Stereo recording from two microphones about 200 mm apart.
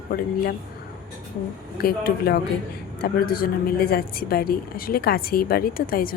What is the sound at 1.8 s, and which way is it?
A woman's voice, 50° left (ahead or behind).